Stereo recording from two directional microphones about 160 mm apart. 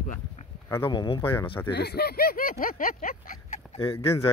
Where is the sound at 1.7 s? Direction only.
90° left; by 3.3 s 60° left (ahead or behind).